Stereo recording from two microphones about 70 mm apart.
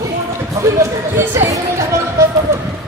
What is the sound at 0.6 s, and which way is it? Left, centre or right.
Speech, right.